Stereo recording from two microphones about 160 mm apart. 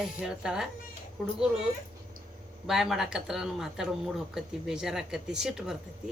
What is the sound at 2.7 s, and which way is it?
Speech, centre (ahead or behind).